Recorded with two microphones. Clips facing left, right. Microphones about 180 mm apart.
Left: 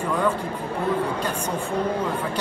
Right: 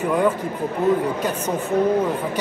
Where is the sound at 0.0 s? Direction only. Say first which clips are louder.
Right 4 dB; 10° right (ahead or behind).